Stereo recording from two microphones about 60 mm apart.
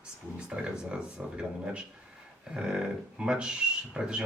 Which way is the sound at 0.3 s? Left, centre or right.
Centre.